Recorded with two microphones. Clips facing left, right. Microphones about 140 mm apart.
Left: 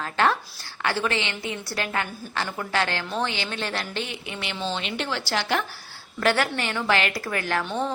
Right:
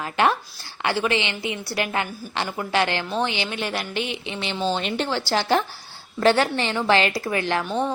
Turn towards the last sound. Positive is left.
turn(degrees=-15)  # may be behind; listen again after turning